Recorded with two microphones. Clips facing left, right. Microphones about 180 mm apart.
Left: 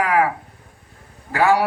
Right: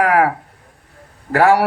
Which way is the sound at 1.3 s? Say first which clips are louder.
Right 4 dB; 65° right (ahead or behind).